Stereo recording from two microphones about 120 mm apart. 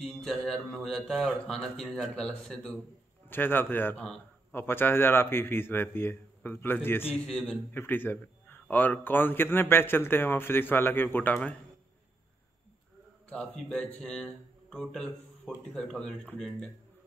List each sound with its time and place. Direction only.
0.0 s a man's voice: 5° left (ahead or behind)
4.0 s a sound: 5° left (ahead or behind)
4.6 s speech: 15° left (ahead or behind)
7.2 s a man's voice: 5° left (ahead or behind)
7.7 s a man's voice: 15° left (ahead or behind)
13.3 s a man's voice: 5° left (ahead or behind)